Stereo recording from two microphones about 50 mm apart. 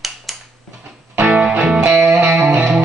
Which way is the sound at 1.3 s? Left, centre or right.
Right.